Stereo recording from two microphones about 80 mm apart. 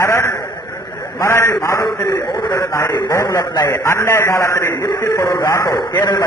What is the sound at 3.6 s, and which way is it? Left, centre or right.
A man's voice, left.